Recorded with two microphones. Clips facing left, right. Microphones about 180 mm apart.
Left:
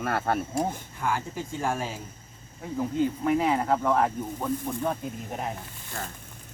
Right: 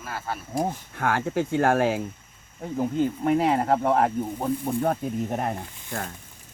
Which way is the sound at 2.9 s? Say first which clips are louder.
Right 1 dB; 45° right (ahead or behind).